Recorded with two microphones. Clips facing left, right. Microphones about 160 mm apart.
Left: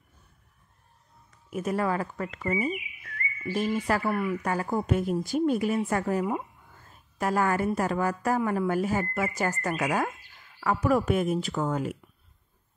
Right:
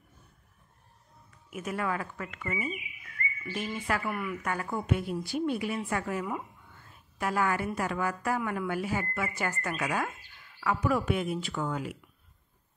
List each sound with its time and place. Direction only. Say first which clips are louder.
1.5 s a woman's voice: left 5 dB; 35° left (ahead or behind)